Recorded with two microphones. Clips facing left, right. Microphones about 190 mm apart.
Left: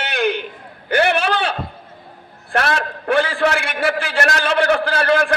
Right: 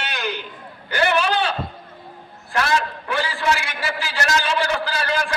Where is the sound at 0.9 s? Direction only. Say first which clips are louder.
Left 3 dB; 60° left (ahead or behind).